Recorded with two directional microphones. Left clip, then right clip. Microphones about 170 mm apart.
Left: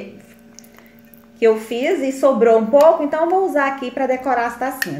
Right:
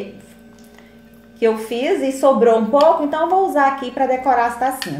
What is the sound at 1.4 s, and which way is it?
A woman's voice, 30° left (ahead or behind).